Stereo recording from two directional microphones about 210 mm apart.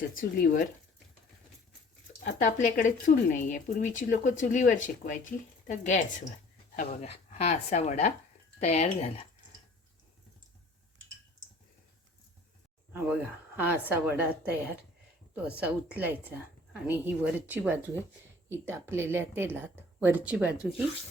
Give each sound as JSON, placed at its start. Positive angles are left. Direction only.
{"t": 0.2, "sound": "speech", "side_deg": 40}
{"t": 2.2, "sound": "speech", "side_deg": 35}
{"t": 12.9, "sound": "speech", "side_deg": -10}